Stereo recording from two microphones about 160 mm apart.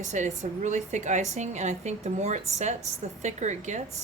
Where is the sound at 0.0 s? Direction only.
50° right (ahead or behind).